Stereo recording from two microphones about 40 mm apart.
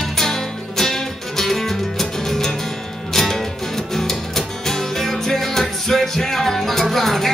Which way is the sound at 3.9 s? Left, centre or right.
Centre.